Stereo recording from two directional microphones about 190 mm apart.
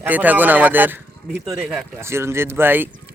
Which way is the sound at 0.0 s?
10° right (ahead or behind).